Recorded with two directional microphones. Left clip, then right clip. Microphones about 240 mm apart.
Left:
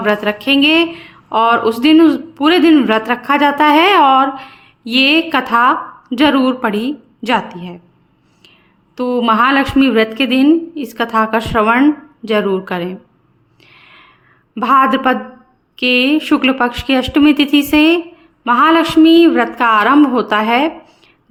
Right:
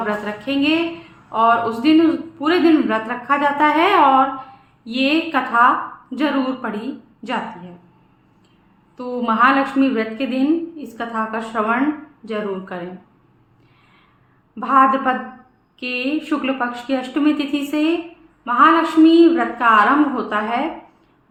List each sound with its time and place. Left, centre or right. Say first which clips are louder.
0.0 s speech: left 8 dB; left
9.0 s speech: left 5 dB; left
14.5 s speech: left 3 dB; left